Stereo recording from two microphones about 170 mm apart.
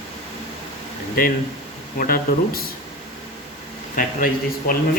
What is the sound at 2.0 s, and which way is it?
Speech, 60° left (ahead or behind).